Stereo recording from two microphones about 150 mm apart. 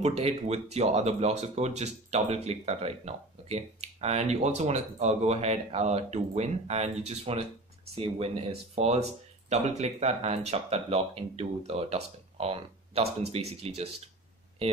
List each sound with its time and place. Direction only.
0.0 s speech: 45° right (ahead or behind)